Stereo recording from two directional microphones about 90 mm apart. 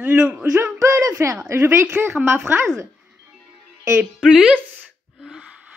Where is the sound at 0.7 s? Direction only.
35° right (ahead or behind).